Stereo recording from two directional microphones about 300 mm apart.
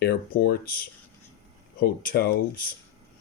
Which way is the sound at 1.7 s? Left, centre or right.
Left.